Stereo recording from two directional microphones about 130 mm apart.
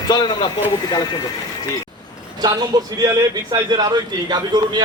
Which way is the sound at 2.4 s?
30° right (ahead or behind).